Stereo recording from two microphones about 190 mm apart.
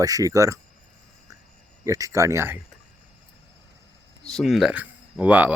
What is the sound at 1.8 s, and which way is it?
Speech, 15° right (ahead or behind).